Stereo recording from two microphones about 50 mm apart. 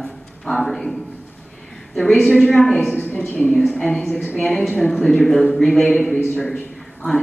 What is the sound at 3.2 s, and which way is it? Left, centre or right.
Speech, left.